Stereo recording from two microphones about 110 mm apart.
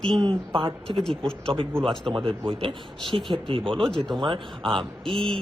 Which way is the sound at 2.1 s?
50° right (ahead or behind).